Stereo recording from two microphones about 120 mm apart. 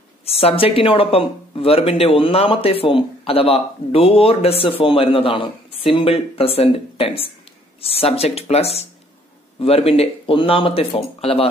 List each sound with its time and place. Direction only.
0.3 s speech: 55° left (ahead or behind)